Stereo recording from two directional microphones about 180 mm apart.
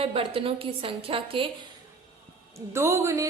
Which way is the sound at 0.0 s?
30° right (ahead or behind).